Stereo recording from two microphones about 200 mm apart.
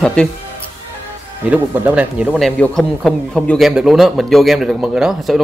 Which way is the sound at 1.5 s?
5° right (ahead or behind).